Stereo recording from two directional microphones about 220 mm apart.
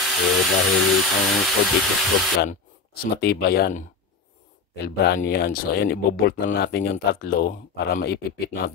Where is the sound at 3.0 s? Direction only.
45° left (ahead or behind).